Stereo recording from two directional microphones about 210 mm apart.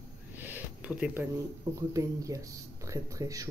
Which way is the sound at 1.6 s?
15° right (ahead or behind).